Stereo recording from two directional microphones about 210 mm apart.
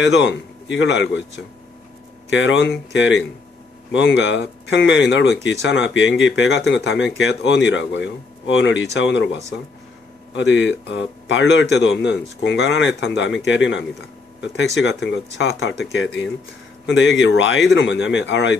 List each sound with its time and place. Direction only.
0.0 s speech: 55° left (ahead or behind)
2.2 s speech: 60° left (ahead or behind)
16.8 s speech: 60° left (ahead or behind)